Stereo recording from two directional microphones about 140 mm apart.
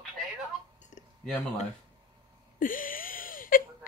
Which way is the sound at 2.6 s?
80° left.